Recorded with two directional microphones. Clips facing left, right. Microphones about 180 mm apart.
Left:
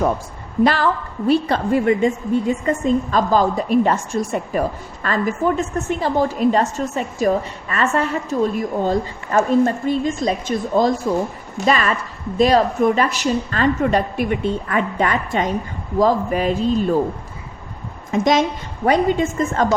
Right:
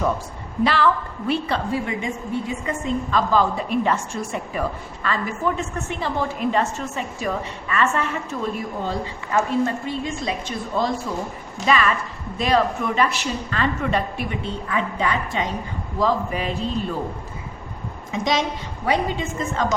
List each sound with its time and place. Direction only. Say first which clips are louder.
0.6 s a woman's voice: left 3 dB; 45° left (ahead or behind)
18.1 s a woman's voice: left 6 dB; 50° left (ahead or behind)